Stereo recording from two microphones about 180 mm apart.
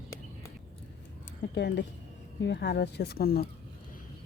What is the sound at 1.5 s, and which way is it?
Speech, 75° left (ahead or behind).